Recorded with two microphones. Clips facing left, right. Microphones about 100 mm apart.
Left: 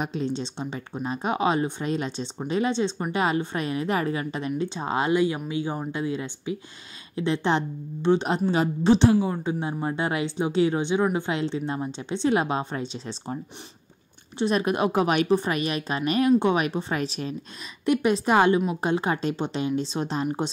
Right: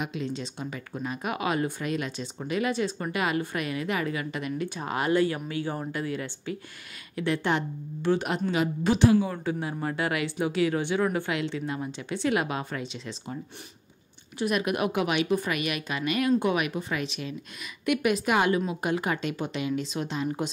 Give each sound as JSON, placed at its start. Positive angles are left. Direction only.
{"t": 0.0, "sound": "speech", "side_deg": 35}
{"t": 11.3, "sound": "a woman's voice", "side_deg": 30}
{"t": 14.4, "sound": "a woman's voice", "side_deg": 30}